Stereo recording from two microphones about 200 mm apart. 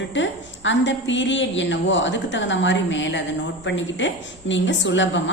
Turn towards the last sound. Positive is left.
turn(degrees=65)  # may be behind; listen again after turning